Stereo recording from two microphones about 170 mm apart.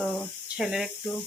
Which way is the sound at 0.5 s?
5° right (ahead or behind).